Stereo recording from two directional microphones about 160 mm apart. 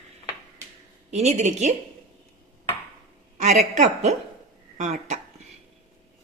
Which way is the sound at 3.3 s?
50° right (ahead or behind).